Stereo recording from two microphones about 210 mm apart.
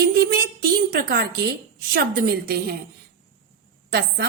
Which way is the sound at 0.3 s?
45° right (ahead or behind).